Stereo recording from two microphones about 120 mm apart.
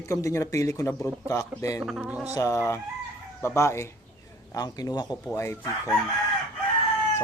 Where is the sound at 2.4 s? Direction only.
25° left (ahead or behind).